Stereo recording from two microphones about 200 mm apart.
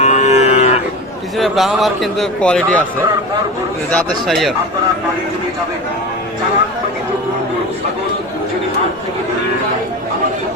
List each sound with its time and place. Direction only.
0.0 s livestock: 35° left (ahead or behind)
1.4 s a man's voice: centre (ahead or behind)
3.9 s a man's voice: centre (ahead or behind)